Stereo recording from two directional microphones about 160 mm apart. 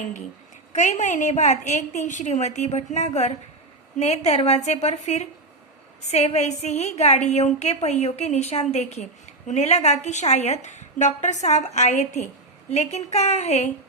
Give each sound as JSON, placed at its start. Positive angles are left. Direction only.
{"t": 0.7, "sound": "a woman's voice", "side_deg": 50}